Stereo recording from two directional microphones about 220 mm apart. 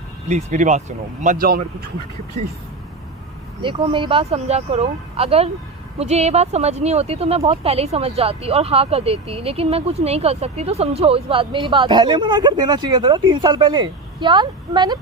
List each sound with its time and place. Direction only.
0.3 s speech: 30° right (ahead or behind)
3.6 s speech: 20° right (ahead or behind)